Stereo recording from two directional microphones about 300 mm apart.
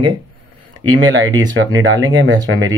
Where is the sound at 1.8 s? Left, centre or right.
Right.